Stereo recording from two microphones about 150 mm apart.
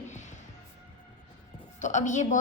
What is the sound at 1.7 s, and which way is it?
Speech, 55° left (ahead or behind).